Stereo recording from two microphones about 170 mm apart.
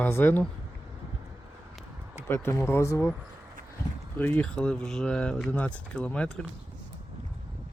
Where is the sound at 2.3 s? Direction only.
15° left (ahead or behind).